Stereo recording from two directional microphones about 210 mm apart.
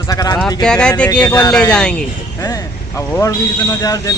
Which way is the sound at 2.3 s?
15° left (ahead or behind).